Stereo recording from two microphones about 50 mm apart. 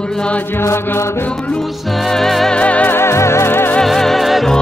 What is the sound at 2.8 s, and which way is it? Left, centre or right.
Music, left.